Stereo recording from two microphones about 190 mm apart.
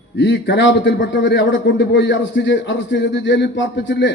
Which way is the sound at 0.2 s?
65° left (ahead or behind).